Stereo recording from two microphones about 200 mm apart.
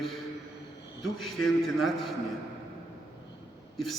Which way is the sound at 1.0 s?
Centre (ahead or behind).